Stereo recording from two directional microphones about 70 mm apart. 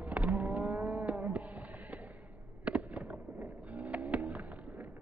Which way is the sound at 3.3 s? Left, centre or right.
Right.